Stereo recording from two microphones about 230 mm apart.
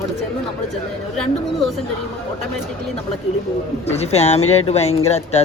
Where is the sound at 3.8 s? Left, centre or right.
Left.